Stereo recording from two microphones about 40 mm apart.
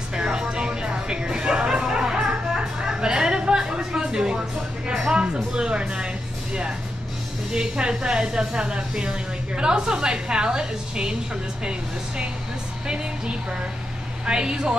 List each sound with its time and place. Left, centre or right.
0.1 s music: centre
5.2 s a woman's voice: right
7.5 s a woman's voice: right
12.8 s a woman's voice: right